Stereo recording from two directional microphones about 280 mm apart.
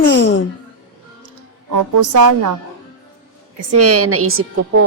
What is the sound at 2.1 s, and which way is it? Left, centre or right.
Speech, right.